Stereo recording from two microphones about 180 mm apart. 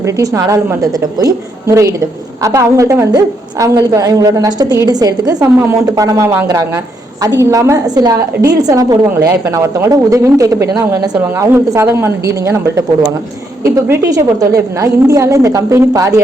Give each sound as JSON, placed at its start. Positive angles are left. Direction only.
{"t": 0.0, "sound": "a woman's voice", "side_deg": -20}